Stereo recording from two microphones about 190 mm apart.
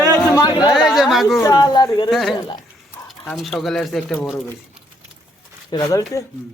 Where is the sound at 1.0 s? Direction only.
Centre (ahead or behind).